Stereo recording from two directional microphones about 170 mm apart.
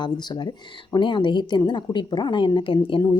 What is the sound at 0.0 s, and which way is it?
Speech, 25° left (ahead or behind).